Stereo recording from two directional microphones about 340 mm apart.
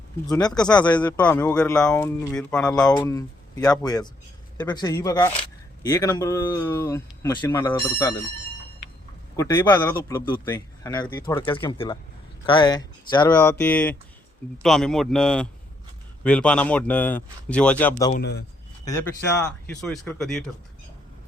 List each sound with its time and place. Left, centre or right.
0.3 s speech: centre
9.3 s speech: centre
18.1 s a man's voice: left
19.4 s speech: centre